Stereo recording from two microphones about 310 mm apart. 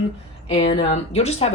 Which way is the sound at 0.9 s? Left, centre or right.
Centre.